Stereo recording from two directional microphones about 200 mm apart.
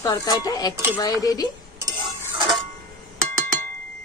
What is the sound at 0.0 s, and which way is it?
Speech, 20° left (ahead or behind).